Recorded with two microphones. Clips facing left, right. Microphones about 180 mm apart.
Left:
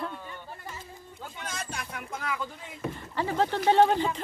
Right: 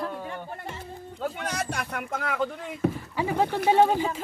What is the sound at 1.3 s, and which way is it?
Speech, 70° right (ahead or behind).